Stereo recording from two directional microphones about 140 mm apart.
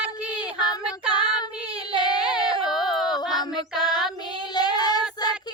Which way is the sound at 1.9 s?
30° left (ahead or behind).